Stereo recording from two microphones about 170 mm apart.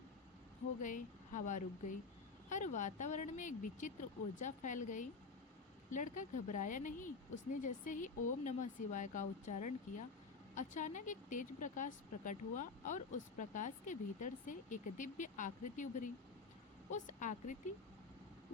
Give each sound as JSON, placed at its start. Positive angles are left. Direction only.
{"t": 0.8, "sound": "a woman's voice", "side_deg": 50}